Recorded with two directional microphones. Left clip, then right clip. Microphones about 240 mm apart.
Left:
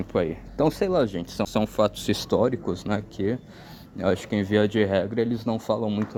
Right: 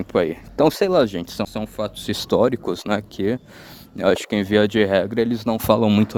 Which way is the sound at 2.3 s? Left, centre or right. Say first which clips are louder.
Right 6 dB; right.